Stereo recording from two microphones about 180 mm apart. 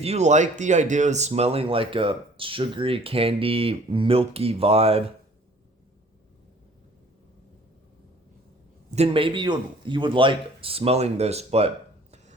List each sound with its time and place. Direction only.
0.0 s speech: 35° right (ahead or behind)
9.0 s speech: 30° right (ahead or behind)